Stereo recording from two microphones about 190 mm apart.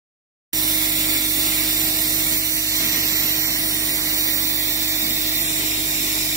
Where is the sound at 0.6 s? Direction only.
20° right (ahead or behind).